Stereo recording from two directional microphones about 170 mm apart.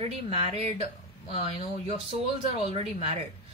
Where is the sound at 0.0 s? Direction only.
35° right (ahead or behind).